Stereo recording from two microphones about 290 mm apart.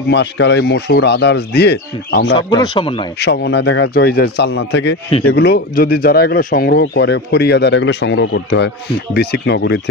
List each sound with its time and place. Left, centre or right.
0.1 s speech: left
2.3 s speech: centre
3.2 s speech: left